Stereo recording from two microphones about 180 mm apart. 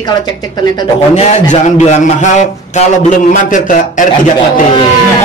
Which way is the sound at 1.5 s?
40° left (ahead or behind).